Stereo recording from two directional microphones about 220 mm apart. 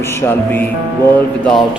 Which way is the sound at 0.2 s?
10° left (ahead or behind).